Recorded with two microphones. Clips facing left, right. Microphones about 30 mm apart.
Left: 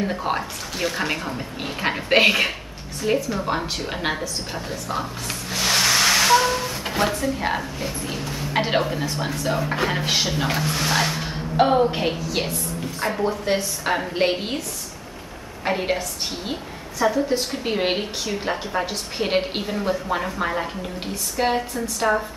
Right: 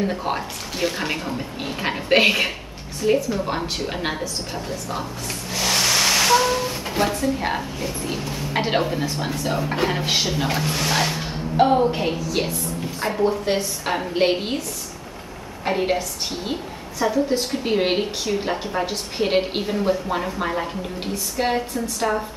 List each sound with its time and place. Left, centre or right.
0.0 s a woman's voice: centre
5.5 s vehicle: centre
6.9 s a woman's voice: centre
11.5 s a woman's voice: centre
15.6 s a woman's voice: centre
21.7 s a woman's voice: centre